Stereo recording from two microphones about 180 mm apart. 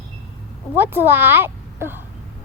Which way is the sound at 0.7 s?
10° right (ahead or behind).